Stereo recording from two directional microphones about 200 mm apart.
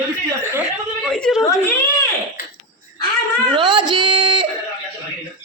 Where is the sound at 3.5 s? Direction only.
25° right (ahead or behind).